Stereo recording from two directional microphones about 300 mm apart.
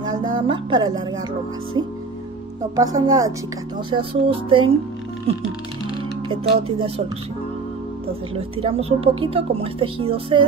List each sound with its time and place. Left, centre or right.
0.2 s music: centre
2.7 s music: centre
6.2 s music: centre
8.4 s speech: centre